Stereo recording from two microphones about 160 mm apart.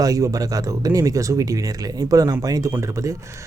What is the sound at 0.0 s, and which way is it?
Speech, 20° right (ahead or behind).